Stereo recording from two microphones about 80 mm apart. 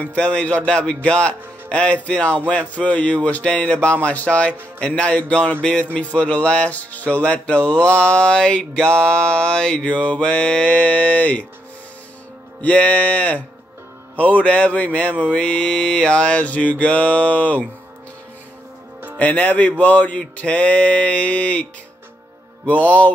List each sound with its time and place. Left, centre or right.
0.0 s speech: centre
12.6 s speech: centre
19.1 s speech: centre
22.7 s speech: centre